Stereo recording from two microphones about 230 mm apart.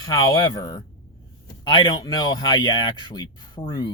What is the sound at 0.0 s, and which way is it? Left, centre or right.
Speech, centre.